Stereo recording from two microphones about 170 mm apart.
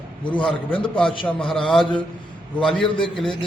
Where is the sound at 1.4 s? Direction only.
30° left (ahead or behind).